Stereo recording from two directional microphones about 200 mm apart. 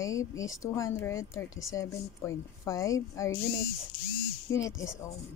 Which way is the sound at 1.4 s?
Centre (ahead or behind).